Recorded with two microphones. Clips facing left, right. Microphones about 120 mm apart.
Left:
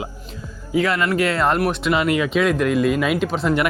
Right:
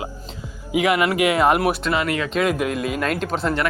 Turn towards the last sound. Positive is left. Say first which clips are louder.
# left 2 dB
turn(degrees=0)  # may be behind; listen again after turning